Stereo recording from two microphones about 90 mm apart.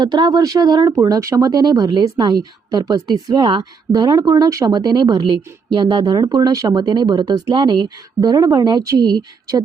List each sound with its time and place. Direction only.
0.0 s speech: 55° right (ahead or behind)
0.9 s speech: 35° right (ahead or behind)
6.7 s speech: 55° right (ahead or behind)